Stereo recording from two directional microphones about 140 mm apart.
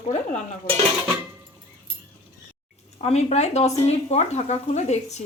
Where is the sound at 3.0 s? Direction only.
50° left (ahead or behind).